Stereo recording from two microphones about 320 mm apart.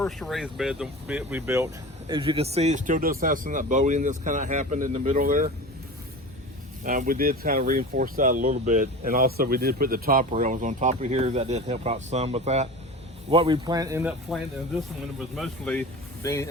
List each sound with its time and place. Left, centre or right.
0.0 s speech: centre; by 5.5 s right
6.8 s speech: right; by 14.3 s centre
15.4 s speech: centre